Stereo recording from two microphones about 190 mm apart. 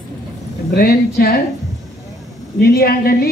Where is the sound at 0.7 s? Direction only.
55° left (ahead or behind).